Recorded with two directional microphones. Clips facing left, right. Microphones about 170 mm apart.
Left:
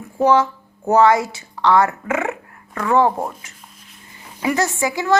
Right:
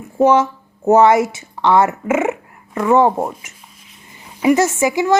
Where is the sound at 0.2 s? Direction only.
20° right (ahead or behind).